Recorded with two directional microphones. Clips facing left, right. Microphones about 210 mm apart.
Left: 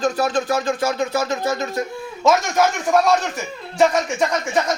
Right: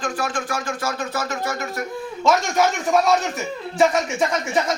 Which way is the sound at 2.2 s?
Centre (ahead or behind).